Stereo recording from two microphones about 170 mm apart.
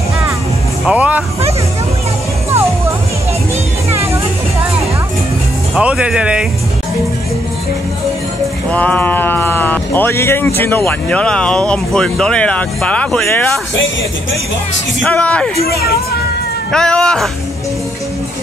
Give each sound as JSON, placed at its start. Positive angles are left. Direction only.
{"t": 0.8, "sound": "vehicle", "side_deg": -10}
{"t": 3.9, "sound": "music", "side_deg": -15}
{"t": 5.8, "sound": "speech", "side_deg": -5}
{"t": 8.6, "sound": "speech", "side_deg": 10}
{"t": 15.0, "sound": "speech", "side_deg": 5}
{"t": 15.6, "sound": "speech", "side_deg": 65}
{"t": 16.7, "sound": "speech", "side_deg": 5}